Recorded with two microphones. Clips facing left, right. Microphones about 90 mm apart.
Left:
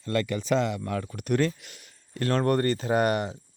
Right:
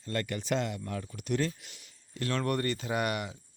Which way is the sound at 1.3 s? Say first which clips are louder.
Left 6 dB; 60° left (ahead or behind).